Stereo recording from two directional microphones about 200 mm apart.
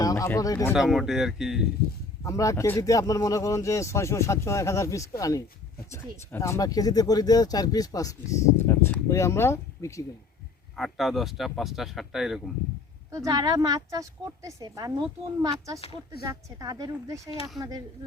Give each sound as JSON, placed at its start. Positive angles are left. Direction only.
{"t": 0.0, "sound": "speech", "side_deg": 15}
{"t": 0.7, "sound": "speech", "side_deg": 0}
{"t": 2.2, "sound": "speech", "side_deg": 15}
{"t": 10.8, "sound": "speech", "side_deg": 0}
{"t": 13.1, "sound": "speech", "side_deg": -15}